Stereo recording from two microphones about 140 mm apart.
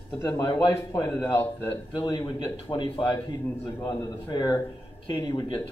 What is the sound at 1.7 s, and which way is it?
A man's voice, 35° left (ahead or behind).